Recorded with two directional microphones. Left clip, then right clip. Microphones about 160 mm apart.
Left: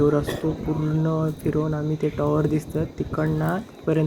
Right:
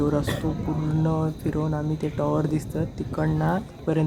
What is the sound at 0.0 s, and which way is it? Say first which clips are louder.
Speech: left 4 dB; 10° left (ahead or behind).